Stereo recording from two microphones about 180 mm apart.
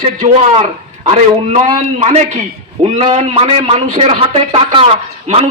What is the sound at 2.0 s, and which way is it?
Speech, 35° right (ahead or behind).